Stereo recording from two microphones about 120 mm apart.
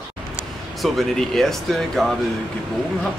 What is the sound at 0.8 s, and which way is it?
Speech, centre (ahead or behind).